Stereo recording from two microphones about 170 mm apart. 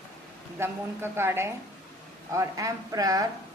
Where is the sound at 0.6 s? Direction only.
15° right (ahead or behind).